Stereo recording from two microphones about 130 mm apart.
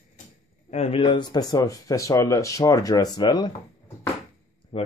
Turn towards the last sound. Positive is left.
turn(degrees=55)  # may be behind; listen again after turning